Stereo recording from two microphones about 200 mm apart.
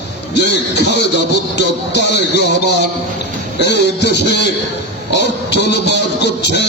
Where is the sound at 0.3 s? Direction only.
60° left (ahead or behind).